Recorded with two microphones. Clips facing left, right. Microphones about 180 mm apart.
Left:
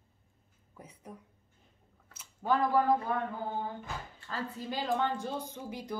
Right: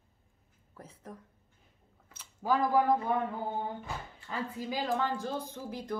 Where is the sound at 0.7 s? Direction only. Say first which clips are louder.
Right 1 dB; 10° left (ahead or behind).